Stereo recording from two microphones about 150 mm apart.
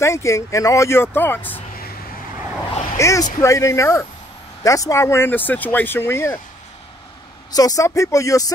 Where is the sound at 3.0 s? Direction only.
20° left (ahead or behind).